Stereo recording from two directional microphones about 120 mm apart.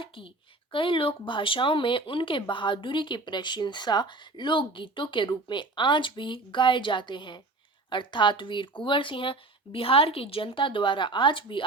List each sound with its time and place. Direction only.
0.7 s speech: 45° left (ahead or behind)